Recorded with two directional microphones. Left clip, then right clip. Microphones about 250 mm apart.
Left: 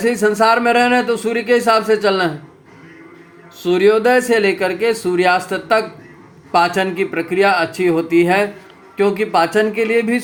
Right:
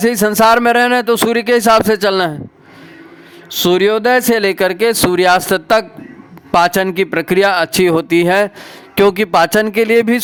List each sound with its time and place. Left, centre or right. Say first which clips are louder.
0.0 s speech: right 3 dB; right
3.5 s speech: right 1 dB; right